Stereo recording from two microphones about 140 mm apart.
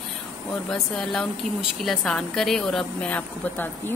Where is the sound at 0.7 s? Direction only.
5° left (ahead or behind).